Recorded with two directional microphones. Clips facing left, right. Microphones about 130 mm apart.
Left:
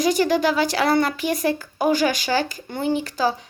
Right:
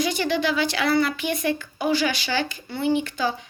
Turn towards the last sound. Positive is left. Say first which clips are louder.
# left 3 dB
turn(degrees=35)  # may be behind; listen again after turning